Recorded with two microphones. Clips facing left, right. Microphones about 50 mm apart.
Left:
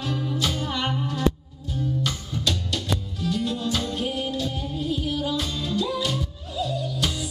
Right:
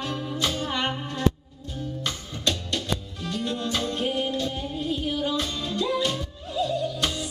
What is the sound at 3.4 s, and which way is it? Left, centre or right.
Music, right.